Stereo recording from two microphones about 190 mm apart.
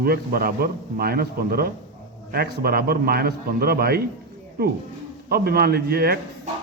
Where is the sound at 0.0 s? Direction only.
55° right (ahead or behind).